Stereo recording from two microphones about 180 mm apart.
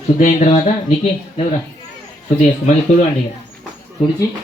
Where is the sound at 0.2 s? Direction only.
45° left (ahead or behind).